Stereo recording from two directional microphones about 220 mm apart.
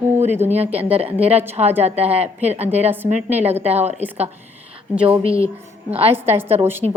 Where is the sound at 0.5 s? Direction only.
30° right (ahead or behind).